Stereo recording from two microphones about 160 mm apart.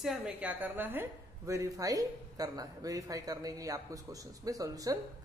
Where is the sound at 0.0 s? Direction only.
5° right (ahead or behind).